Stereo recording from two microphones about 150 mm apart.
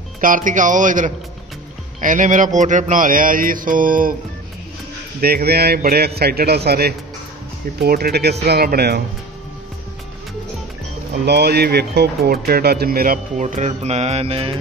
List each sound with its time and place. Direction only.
0.2 s speech: 60° right (ahead or behind)
5.2 s speech: 90° right
11.2 s speech: 90° right
13.4 s mantra: 50° right (ahead or behind)